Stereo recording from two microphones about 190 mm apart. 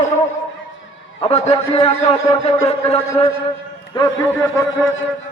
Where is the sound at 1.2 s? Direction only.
35° left (ahead or behind).